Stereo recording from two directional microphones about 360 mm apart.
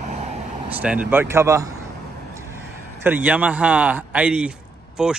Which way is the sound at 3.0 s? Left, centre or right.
Centre.